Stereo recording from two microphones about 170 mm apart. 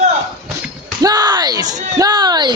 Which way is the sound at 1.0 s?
25° right (ahead or behind).